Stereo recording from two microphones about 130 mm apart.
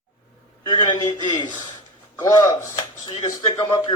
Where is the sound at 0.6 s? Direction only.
40° left (ahead or behind).